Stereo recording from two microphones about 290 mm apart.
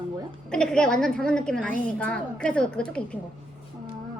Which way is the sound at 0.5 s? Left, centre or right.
Centre.